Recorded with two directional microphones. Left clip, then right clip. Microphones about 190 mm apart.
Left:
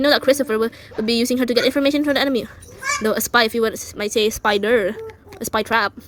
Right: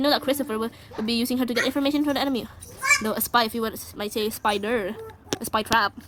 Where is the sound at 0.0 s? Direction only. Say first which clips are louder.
Left 7 dB; 15° left (ahead or behind).